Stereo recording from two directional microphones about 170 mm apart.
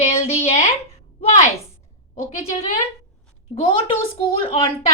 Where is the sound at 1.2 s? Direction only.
40° left (ahead or behind).